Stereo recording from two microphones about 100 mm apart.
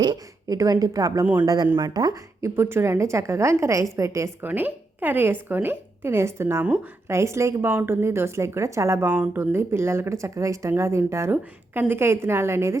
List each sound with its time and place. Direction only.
0.0 s a sound: 50° right (ahead or behind)
0.5 s a woman's voice: 35° right (ahead or behind)
1.2 s speech: 15° right (ahead or behind)
1.8 s speech: 45° right (ahead or behind)
2.4 s a woman's voice: 25° right (ahead or behind)
4.4 s speech: 20° right (ahead or behind)
9.0 s speech: 15° right (ahead or behind)
9.4 s speech: 25° right (ahead or behind)